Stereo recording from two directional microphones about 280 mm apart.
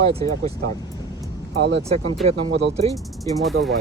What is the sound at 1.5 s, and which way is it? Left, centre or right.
Speech, right.